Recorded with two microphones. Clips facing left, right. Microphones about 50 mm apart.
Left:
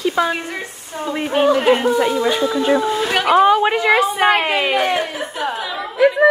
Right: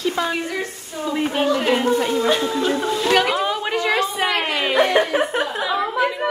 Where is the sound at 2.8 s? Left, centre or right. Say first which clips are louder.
Even; centre.